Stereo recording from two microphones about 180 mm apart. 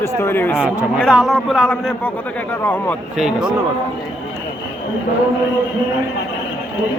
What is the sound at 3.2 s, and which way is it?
Speech, 5° right (ahead or behind).